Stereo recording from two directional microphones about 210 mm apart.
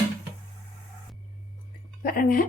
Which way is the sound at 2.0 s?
40° left (ahead or behind).